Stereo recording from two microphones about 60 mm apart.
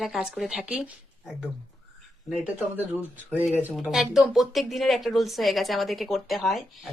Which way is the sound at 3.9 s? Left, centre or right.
Centre.